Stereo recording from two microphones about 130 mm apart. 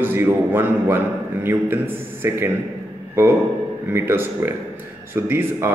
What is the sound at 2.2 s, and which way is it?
Speech, 20° right (ahead or behind).